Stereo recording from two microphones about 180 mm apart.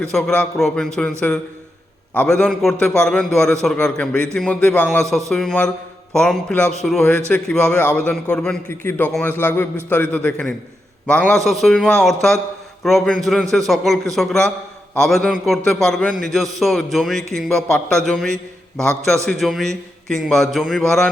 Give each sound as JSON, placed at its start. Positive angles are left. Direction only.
{"t": 0.0, "sound": "a man's voice", "side_deg": 5}
{"t": 2.1, "sound": "a man's voice", "side_deg": 5}